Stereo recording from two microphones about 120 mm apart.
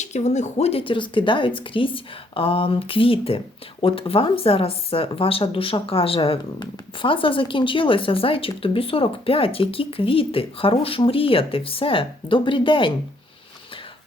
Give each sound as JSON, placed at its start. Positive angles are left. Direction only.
{"t": 0.0, "sound": "a woman's voice", "side_deg": 70}